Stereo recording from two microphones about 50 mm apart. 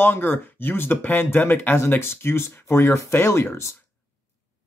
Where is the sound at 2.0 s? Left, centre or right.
Left.